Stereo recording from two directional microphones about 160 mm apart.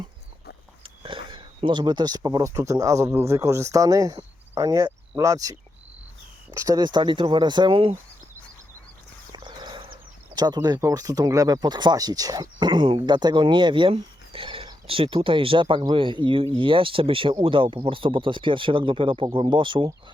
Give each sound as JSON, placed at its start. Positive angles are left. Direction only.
{"t": 1.0, "sound": "speech", "side_deg": -30}
{"t": 4.2, "sound": "cricket", "side_deg": -20}
{"t": 6.6, "sound": "speech", "side_deg": -25}
{"t": 9.3, "sound": "horse", "side_deg": -25}
{"t": 10.3, "sound": "speech", "side_deg": -25}